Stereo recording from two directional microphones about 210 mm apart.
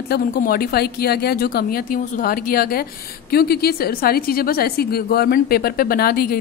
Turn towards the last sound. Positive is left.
turn(degrees=45)  # may be behind; listen again after turning